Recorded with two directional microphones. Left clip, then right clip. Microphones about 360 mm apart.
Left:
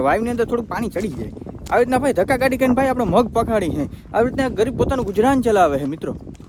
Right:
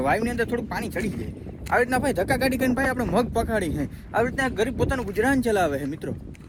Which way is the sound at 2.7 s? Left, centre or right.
Centre.